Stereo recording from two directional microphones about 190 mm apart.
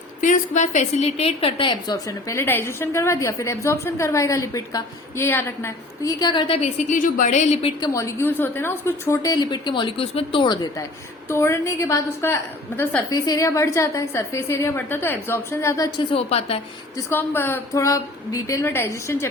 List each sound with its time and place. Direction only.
0.2 s a woman's voice: 40° left (ahead or behind)
7.9 s a woman's voice: 15° left (ahead or behind)
16.1 s a woman's voice: 30° left (ahead or behind)
17.1 s a woman's voice: 10° left (ahead or behind)